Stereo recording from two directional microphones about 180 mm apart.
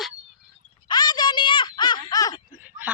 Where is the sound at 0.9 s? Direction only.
25° left (ahead or behind).